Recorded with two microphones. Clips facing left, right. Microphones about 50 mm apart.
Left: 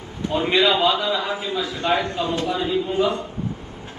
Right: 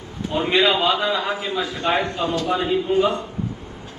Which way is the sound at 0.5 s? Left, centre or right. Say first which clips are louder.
Even; right.